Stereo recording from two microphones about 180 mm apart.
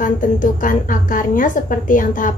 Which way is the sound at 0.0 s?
50° left (ahead or behind).